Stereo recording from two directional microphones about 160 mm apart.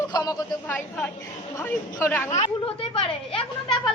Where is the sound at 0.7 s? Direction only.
10° left (ahead or behind).